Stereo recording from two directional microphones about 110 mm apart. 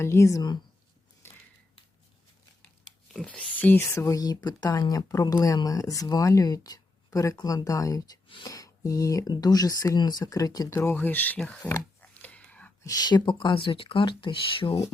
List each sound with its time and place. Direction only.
0.0 s speech: 25° left (ahead or behind)
3.1 s speech: 10° left (ahead or behind)
11.3 s speech: 5° left (ahead or behind)
11.6 s a sound: 15° left (ahead or behind)
12.8 s speech: 35° left (ahead or behind); by 14.8 s 50° left (ahead or behind)